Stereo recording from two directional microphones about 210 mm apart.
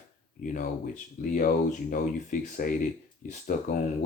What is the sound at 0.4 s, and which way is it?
Speech, 40° left (ahead or behind).